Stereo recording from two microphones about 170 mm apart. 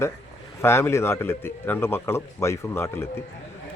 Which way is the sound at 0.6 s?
15° left (ahead or behind).